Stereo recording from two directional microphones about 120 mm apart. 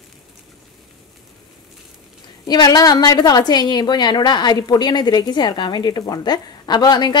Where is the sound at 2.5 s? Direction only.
30° left (ahead or behind).